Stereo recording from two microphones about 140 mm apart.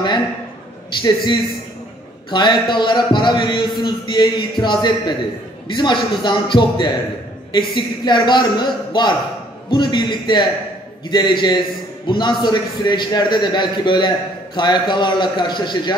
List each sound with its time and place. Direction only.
1.0 s a man's voice: 35° left (ahead or behind)